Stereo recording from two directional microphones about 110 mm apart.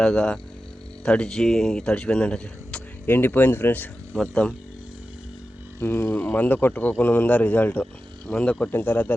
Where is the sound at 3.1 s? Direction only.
20° left (ahead or behind).